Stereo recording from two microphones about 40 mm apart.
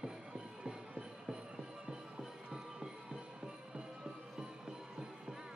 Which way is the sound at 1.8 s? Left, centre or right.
Centre.